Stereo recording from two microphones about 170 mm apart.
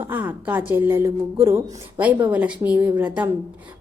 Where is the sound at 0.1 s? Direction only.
10° right (ahead or behind).